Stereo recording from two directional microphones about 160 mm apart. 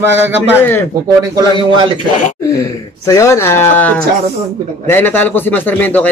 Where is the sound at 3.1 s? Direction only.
20° left (ahead or behind).